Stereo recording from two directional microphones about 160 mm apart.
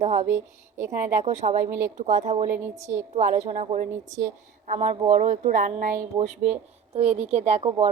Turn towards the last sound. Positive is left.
turn(degrees=-40)  # may be behind; listen again after turning